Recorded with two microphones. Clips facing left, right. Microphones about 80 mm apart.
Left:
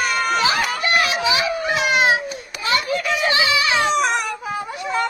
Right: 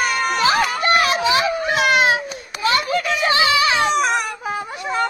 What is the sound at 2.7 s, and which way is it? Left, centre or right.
Children playing, right.